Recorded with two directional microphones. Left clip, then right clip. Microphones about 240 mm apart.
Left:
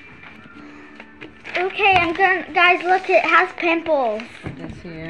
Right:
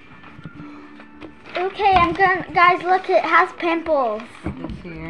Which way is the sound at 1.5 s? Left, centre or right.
Centre.